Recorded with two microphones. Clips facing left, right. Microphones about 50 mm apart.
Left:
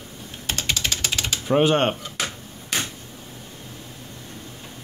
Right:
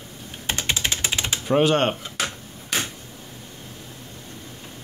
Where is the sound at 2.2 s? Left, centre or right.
Centre.